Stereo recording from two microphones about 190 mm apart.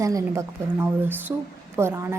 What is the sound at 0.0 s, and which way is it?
A woman's voice, 15° right (ahead or behind).